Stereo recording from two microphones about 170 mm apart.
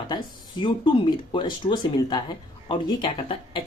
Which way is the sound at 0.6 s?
30° left (ahead or behind).